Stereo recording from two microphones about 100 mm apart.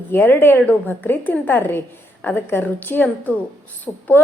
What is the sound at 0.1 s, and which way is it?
A woman's voice, 20° left (ahead or behind).